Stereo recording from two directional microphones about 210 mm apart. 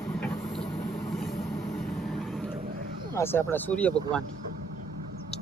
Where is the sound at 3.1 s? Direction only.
10° left (ahead or behind).